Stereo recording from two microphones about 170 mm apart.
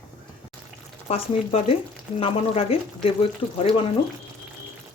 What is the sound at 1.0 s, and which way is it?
Speech, 35° left (ahead or behind).